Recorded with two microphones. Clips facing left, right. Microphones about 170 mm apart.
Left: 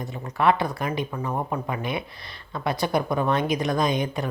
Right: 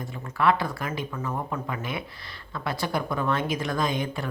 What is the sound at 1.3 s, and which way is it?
Speech, 30° left (ahead or behind).